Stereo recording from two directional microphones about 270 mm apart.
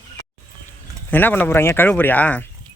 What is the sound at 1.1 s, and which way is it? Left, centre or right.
Speech, centre.